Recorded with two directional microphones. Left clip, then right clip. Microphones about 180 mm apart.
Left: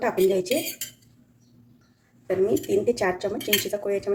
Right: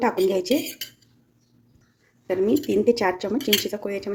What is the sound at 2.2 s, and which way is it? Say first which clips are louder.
Speech: right 1 dB; 55° right (ahead or behind).